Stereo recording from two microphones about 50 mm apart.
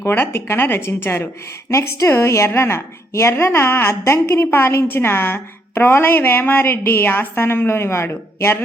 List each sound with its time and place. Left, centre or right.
0.1 s a woman's voice: left
1.7 s a woman's voice: left
2.5 s a woman's voice: left
7.7 s a man's voice: left